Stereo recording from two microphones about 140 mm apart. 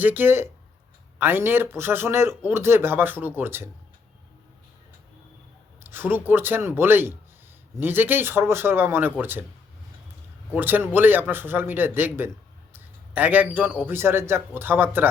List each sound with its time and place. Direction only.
0.0 s speech: 15° right (ahead or behind)
5.8 s speech: 15° right (ahead or behind)
10.5 s speech: 15° right (ahead or behind)